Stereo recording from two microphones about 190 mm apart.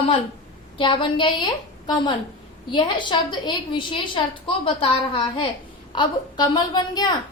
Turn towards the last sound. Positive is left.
turn(degrees=20)  # may be behind; listen again after turning